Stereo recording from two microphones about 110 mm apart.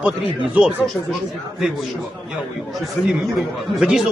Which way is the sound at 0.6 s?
15° right (ahead or behind).